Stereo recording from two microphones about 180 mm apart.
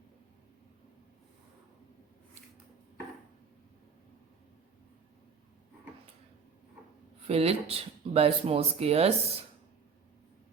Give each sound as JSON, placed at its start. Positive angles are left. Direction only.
{"t": 7.3, "sound": "speech", "side_deg": -35}